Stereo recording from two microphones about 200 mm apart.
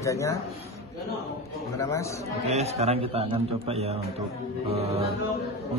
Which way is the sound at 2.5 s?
30° right (ahead or behind).